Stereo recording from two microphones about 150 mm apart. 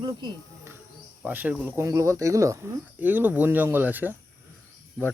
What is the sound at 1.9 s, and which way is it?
Speech, 20° right (ahead or behind).